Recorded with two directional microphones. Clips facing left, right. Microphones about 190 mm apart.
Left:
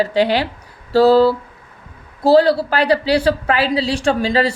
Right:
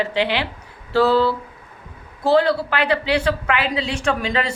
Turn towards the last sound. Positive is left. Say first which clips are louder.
# left 5 dB
turn(degrees=35)  # may be behind; listen again after turning